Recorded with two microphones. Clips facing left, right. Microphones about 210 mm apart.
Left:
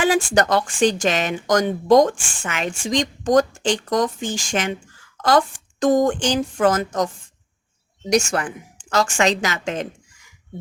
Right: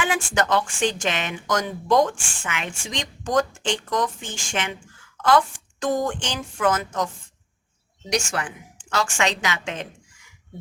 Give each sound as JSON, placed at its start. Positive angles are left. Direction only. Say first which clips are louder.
{"t": 0.0, "sound": "speech", "louder": "left 6 dB", "side_deg": 40}
{"t": 8.1, "sound": "a woman's voice", "louder": "left 6 dB", "side_deg": 45}